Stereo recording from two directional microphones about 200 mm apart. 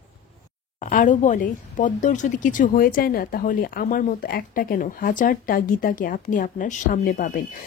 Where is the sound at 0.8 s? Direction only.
40° left (ahead or behind).